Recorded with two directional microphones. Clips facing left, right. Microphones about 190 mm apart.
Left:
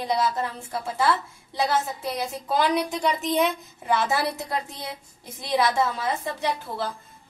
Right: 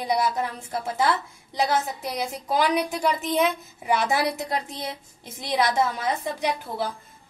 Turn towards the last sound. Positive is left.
turn(degrees=-20)  # may be behind; listen again after turning